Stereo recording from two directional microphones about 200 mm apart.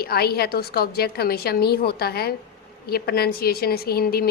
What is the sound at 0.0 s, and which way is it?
A woman's voice, 50° left (ahead or behind).